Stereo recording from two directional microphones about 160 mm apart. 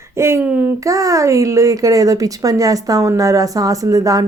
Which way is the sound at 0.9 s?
20° right (ahead or behind).